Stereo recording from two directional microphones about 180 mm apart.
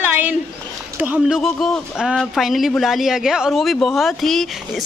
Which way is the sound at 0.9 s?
5° right (ahead or behind).